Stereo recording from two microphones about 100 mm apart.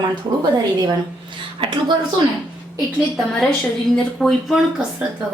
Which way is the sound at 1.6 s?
55° right (ahead or behind).